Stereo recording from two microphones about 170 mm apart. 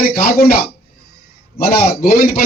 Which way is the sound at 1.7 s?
65° left (ahead or behind).